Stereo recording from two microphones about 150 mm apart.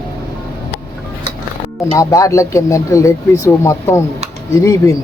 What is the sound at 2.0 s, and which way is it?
Speech, 20° left (ahead or behind).